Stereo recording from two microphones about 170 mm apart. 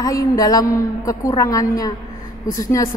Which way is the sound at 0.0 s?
20° left (ahead or behind).